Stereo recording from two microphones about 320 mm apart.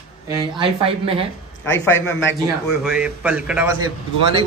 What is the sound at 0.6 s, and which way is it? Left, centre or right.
Speech, centre.